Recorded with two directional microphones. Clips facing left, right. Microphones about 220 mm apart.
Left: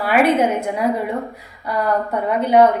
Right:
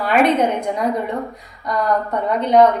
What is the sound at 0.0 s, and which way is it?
A woman's voice, 5° left (ahead or behind).